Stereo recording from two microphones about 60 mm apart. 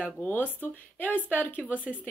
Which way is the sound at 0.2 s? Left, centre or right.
Left.